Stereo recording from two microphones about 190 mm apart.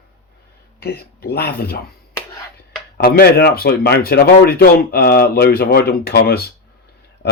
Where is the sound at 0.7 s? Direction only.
55° left (ahead or behind).